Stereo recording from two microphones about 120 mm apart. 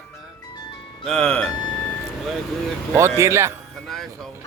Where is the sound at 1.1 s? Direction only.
5° left (ahead or behind).